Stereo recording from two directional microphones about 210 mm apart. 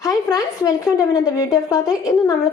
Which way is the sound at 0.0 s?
15° left (ahead or behind).